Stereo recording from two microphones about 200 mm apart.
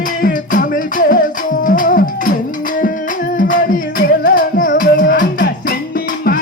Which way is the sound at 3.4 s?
45° left (ahead or behind).